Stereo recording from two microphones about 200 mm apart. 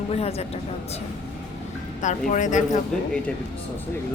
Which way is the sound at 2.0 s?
40° left (ahead or behind).